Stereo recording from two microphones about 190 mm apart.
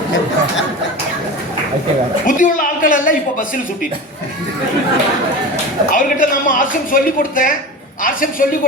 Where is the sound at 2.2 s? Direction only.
45° left (ahead or behind).